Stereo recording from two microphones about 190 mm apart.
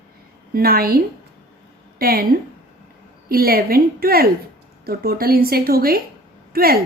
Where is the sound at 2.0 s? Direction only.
50° right (ahead or behind).